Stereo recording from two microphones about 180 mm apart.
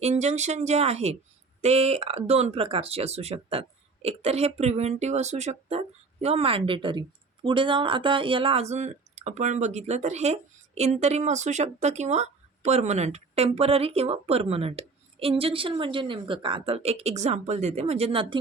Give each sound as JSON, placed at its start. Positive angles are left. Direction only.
{"t": 0.0, "sound": "speech", "side_deg": -40}